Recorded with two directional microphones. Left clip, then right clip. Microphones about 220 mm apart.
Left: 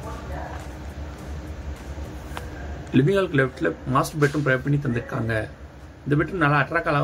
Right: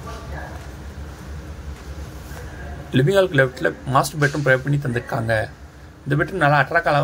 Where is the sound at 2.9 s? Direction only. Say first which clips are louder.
Right 4 dB; 20° right (ahead or behind).